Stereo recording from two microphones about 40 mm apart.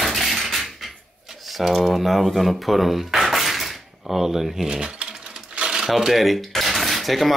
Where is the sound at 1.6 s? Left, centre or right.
Centre.